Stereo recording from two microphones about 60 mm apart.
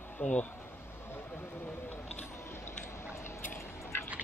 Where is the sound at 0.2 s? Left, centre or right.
Left.